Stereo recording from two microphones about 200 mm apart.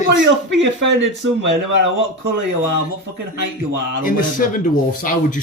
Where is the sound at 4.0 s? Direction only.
40° left (ahead or behind).